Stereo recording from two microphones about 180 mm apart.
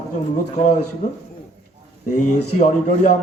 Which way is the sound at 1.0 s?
40° left (ahead or behind).